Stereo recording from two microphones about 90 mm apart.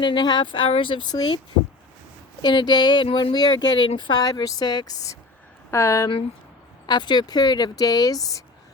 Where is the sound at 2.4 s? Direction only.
55° left (ahead or behind).